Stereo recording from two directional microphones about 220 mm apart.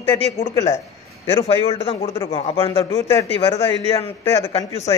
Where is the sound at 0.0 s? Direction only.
15° left (ahead or behind).